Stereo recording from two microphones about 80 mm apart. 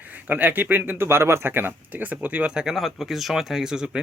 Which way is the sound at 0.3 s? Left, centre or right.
Right.